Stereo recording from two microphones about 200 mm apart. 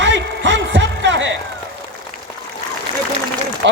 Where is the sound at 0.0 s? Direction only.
60° right (ahead or behind).